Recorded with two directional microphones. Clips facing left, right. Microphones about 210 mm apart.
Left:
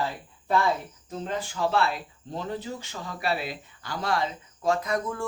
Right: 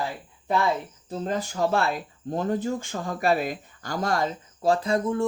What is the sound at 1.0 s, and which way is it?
Speech, 40° right (ahead or behind).